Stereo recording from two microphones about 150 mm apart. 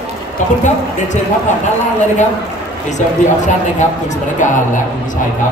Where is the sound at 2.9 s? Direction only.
55° left (ahead or behind).